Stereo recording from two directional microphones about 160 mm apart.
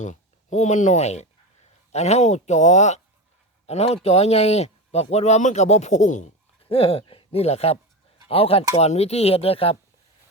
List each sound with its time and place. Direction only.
0.0 s speech: 50° left (ahead or behind)
6.7 s speech: 40° left (ahead or behind)